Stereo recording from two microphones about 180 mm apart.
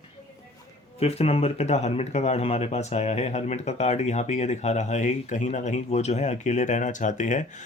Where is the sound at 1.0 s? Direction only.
35° left (ahead or behind).